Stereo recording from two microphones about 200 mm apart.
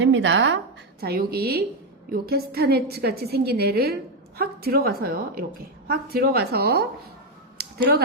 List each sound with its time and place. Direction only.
0.0 s speech: 65° right (ahead or behind)
1.0 s a woman's voice: 50° right (ahead or behind)